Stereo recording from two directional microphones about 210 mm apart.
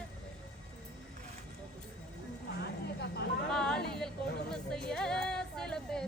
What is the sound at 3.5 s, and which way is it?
Speech, 5° left (ahead or behind).